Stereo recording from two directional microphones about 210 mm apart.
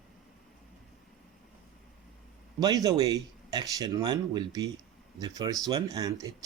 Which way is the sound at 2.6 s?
20° right (ahead or behind).